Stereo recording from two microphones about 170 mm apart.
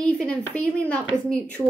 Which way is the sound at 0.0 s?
5° left (ahead or behind).